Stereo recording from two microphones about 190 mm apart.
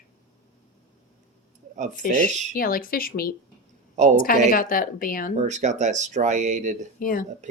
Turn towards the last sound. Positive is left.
turn(degrees=45)  # may be behind; listen again after turning